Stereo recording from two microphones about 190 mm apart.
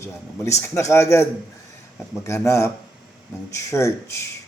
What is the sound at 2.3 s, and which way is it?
Speech, 15° left (ahead or behind).